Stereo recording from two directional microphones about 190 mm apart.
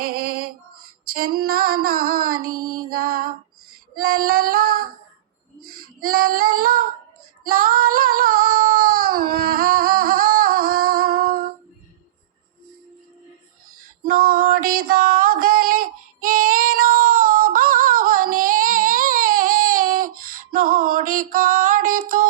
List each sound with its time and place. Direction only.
0.0 s female singing: 50° right (ahead or behind)
5.6 s child singing: 50° right (ahead or behind)
13.7 s a sound: 45° right (ahead or behind)